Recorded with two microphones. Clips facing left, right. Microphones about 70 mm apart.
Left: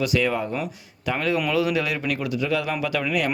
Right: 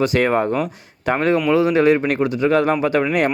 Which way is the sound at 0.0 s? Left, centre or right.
Right.